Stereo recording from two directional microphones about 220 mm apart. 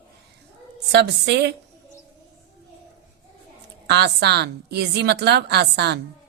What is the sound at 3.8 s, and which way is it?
A woman's voice, 50° right (ahead or behind).